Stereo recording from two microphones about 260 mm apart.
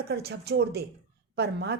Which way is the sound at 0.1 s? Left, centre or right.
Right.